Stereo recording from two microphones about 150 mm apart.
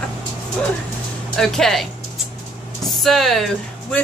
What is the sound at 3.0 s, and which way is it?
Speech, centre (ahead or behind).